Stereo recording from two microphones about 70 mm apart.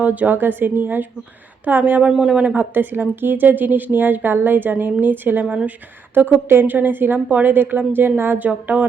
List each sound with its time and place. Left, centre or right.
0.0 s a woman's voice: right